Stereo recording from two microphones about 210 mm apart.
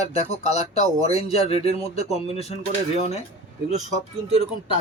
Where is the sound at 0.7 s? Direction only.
30° left (ahead or behind).